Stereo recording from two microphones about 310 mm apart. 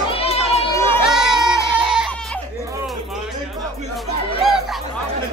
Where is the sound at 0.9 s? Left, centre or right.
Centre.